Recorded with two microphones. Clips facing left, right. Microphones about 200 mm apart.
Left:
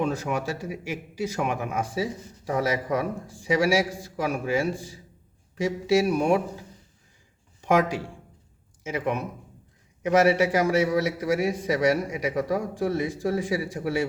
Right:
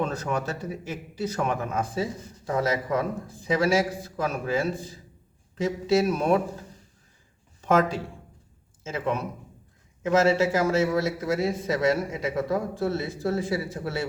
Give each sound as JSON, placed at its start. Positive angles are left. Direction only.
{"t": 0.0, "sound": "a man's voice", "side_deg": 10}
{"t": 7.6, "sound": "a man's voice", "side_deg": 15}